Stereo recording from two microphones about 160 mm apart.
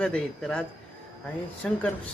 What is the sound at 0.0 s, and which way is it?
Speech, 5° left (ahead or behind).